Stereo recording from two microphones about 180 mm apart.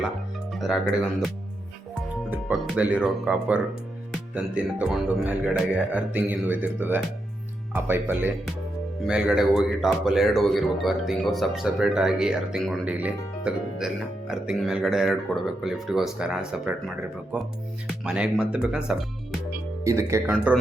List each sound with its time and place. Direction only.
0.5 s speech: centre (ahead or behind)
2.3 s speech: 5° right (ahead or behind)
18.0 s speech: 5° right (ahead or behind)
19.8 s speech: 15° right (ahead or behind)
20.2 s speech: 5° right (ahead or behind)